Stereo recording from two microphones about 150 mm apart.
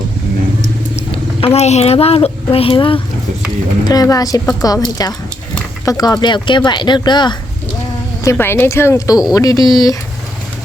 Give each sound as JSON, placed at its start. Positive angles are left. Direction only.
{"t": 1.1, "sound": "speech", "side_deg": 40}
{"t": 3.8, "sound": "speech", "side_deg": 25}
{"t": 8.2, "sound": "speech", "side_deg": 15}